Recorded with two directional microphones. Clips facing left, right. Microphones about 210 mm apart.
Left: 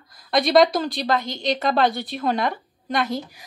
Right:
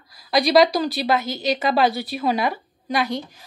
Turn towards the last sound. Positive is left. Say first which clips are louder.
# right 1 dB
turn(degrees=0)  # may be behind; listen again after turning